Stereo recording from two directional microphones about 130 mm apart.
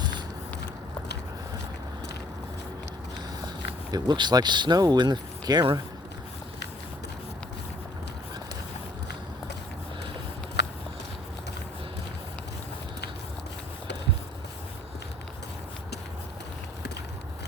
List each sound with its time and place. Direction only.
3.9 s speech: 30° right (ahead or behind)